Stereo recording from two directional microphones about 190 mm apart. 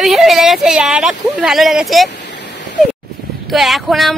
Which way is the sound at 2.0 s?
65° left (ahead or behind).